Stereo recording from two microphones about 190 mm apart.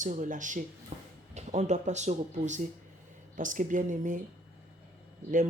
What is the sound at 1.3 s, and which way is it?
Speech, 35° right (ahead or behind).